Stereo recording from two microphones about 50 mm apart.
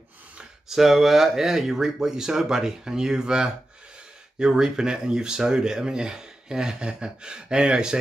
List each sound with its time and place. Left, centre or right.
0.4 s speech: centre